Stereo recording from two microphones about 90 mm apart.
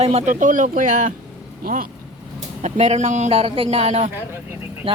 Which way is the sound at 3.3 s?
90° right.